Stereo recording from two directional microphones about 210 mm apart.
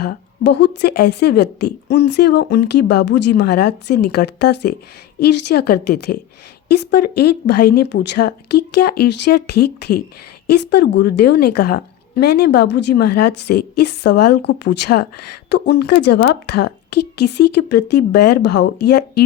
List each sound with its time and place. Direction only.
0.0 s speech: 55° left (ahead or behind)